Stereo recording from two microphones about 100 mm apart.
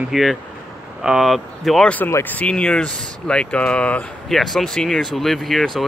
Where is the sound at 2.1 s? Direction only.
25° left (ahead or behind).